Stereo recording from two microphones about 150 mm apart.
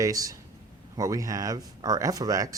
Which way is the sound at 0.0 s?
25° right (ahead or behind).